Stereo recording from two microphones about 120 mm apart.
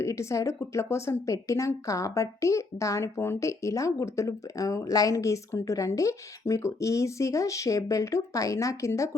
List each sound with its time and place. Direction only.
0.0 s a woman's voice: 25° left (ahead or behind)